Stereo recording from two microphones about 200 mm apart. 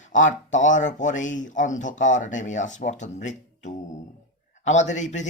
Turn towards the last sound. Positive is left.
turn(degrees=35)  # may be behind; listen again after turning